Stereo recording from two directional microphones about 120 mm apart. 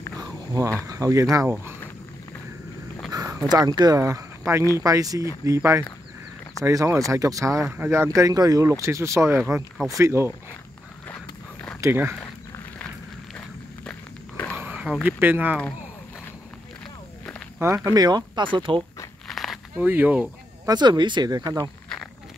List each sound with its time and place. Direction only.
0.2 s speech: 25° right (ahead or behind)
3.1 s speech: 30° right (ahead or behind)
11.8 s speech: 20° right (ahead or behind)
13.8 s walk: 15° left (ahead or behind)
14.6 s a sound: 10° right (ahead or behind)
15.0 s speech: 15° right (ahead or behind)
17.6 s speech: 20° right (ahead or behind)
17.9 s speech: 35° right (ahead or behind)
19.2 s a sound: centre (ahead or behind)
19.8 s speech: 15° right (ahead or behind)
20.6 s speech: 35° right (ahead or behind)